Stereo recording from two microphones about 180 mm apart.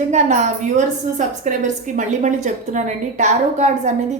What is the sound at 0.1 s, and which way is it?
A woman's voice, 40° right (ahead or behind).